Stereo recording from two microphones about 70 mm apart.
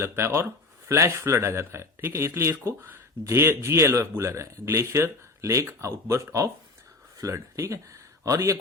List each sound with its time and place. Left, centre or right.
0.0 s speech: right